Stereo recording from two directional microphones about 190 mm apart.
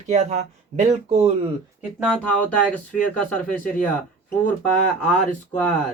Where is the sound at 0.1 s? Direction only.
40° right (ahead or behind).